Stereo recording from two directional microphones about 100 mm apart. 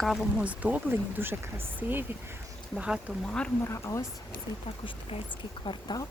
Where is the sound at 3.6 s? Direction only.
30° left (ahead or behind).